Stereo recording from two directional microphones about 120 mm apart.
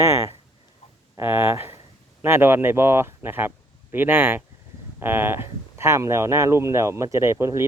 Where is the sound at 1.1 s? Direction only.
20° right (ahead or behind).